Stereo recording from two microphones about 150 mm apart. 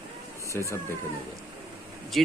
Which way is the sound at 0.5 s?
20° left (ahead or behind).